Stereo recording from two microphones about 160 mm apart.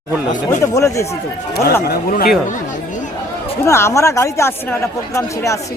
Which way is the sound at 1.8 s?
70° left (ahead or behind).